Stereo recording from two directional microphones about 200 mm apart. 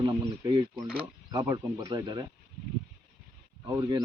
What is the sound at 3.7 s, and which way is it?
Speech, 20° right (ahead or behind).